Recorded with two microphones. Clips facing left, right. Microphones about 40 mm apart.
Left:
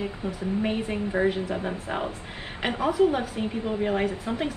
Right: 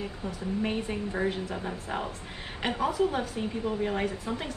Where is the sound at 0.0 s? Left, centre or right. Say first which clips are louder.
Left 4 dB; centre.